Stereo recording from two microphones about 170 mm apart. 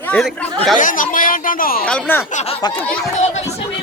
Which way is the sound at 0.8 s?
50° left (ahead or behind).